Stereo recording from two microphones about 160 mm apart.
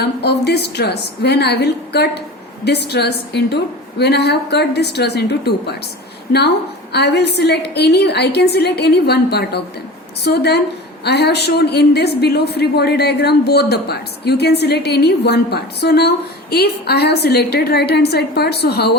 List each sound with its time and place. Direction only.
0.0 s a woman's voice: 90° left
6.9 s a woman's voice: 90° left